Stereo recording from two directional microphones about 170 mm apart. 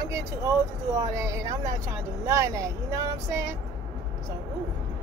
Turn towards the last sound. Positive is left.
turn(degrees=-20)  # may be behind; listen again after turning